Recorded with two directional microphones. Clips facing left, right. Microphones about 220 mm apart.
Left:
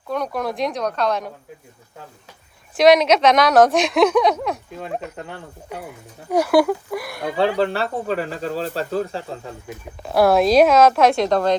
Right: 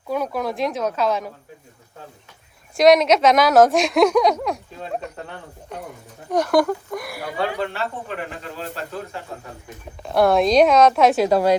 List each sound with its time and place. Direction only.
0.1 s a woman's voice: 5° right (ahead or behind)
2.7 s a woman's voice: centre (ahead or behind)
7.3 s speech: 35° left (ahead or behind)
10.0 s a woman's voice: 5° left (ahead or behind)